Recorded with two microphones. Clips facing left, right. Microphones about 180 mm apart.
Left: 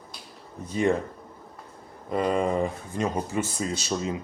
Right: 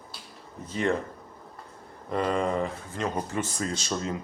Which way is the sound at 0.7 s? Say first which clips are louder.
Left 3 dB; 15° left (ahead or behind).